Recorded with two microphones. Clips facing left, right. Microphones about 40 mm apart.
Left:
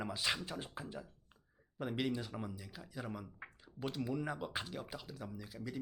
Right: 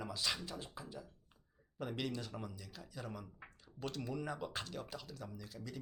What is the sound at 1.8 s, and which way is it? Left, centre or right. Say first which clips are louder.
Speech: left 3 dB; centre.